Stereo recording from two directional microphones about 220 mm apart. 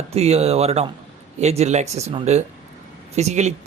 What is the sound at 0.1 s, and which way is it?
Speech, 30° right (ahead or behind).